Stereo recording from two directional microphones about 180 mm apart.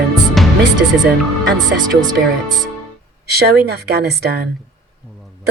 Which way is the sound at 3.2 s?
60° right (ahead or behind).